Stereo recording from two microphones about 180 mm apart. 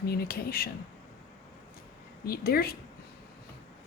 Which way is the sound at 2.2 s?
60° left (ahead or behind).